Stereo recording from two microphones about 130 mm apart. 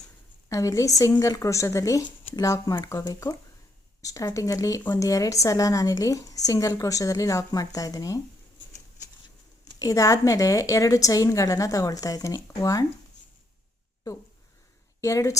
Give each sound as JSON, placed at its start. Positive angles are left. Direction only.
{"t": 0.4, "sound": "a woman's voice", "side_deg": 25}
{"t": 9.7, "sound": "a woman's voice", "side_deg": 25}
{"t": 15.0, "sound": "a woman's voice", "side_deg": 25}